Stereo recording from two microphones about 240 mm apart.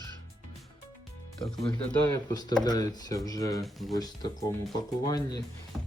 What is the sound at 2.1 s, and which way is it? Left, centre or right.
Speech, centre.